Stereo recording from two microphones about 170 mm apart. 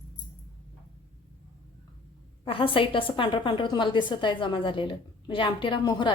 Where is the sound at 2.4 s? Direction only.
30° left (ahead or behind).